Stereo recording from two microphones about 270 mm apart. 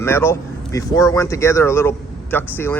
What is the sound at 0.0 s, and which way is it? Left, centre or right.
Speech, centre.